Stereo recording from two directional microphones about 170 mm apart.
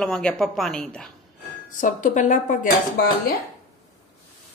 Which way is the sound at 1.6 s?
50° left (ahead or behind).